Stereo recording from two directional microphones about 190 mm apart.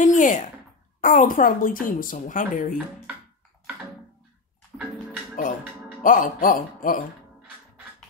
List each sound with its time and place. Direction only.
0.0 s speech: 40° left (ahead or behind)
6.0 s speech: 45° left (ahead or behind)